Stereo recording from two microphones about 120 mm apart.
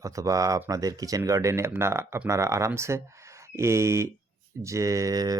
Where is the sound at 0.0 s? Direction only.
25° right (ahead or behind).